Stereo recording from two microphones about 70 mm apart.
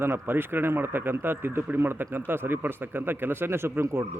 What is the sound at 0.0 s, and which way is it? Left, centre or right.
A man's voice, right.